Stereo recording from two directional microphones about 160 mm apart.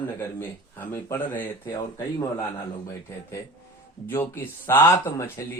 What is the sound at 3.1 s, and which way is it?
Speech, 15° left (ahead or behind).